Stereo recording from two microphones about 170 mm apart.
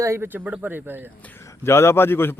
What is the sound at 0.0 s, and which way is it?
Speech, 15° right (ahead or behind).